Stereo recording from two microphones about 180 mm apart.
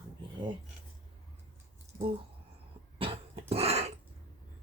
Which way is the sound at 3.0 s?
30° right (ahead or behind).